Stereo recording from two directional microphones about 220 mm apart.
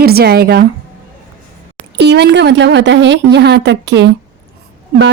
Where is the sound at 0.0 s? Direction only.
45° right (ahead or behind).